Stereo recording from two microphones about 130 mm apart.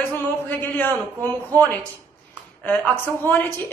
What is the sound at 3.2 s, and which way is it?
Speech, 15° left (ahead or behind).